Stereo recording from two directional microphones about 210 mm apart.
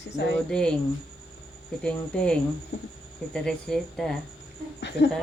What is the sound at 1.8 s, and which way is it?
Speech, 5° left (ahead or behind).